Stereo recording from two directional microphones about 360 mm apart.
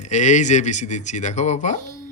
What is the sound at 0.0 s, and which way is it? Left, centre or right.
Speech, centre.